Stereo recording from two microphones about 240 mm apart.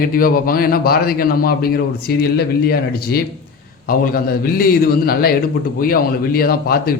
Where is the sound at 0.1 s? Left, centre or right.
Left.